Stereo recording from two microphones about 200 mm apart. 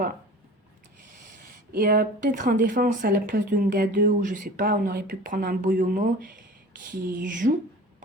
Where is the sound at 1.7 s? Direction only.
50° right (ahead or behind).